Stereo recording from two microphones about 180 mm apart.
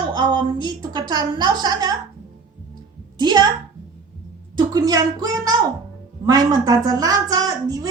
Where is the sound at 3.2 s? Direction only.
25° right (ahead or behind).